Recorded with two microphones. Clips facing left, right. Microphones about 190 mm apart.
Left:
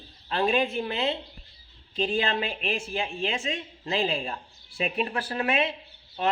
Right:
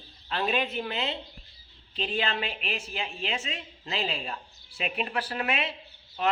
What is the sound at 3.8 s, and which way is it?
Speech, 45° left (ahead or behind).